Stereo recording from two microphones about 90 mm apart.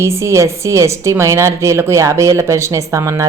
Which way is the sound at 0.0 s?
30° right (ahead or behind).